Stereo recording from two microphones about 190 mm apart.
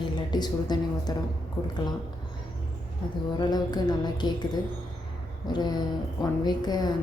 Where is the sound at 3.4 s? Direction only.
20° left (ahead or behind).